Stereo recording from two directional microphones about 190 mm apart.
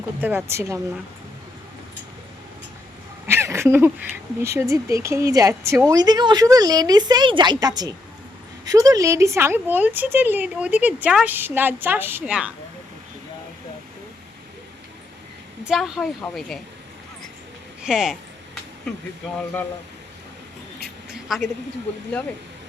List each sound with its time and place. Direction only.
0.2 s speech: 10° right (ahead or behind)
3.2 s a sound: 15° right (ahead or behind)
4.5 s speech: 15° right (ahead or behind)
15.6 s speech: centre (ahead or behind)
17.8 s speech: 5° right (ahead or behind)
21.1 s a sound: centre (ahead or behind)